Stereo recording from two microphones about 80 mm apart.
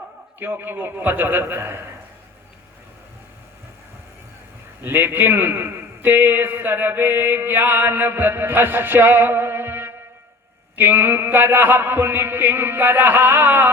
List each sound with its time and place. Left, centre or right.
0.3 s a man's voice: right
4.8 s a man's voice: right